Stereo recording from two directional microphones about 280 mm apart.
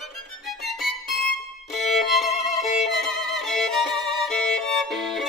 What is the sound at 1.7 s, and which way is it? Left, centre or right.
Violin, centre.